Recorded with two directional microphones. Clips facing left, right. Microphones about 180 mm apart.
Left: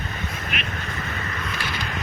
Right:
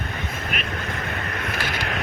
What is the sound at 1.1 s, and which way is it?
Vehicle, 55° right (ahead or behind).